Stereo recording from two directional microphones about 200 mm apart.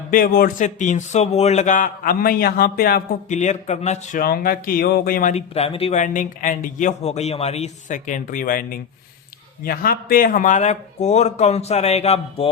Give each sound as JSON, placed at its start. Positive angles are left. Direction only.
{"t": 0.1, "sound": "a man's voice", "side_deg": 45}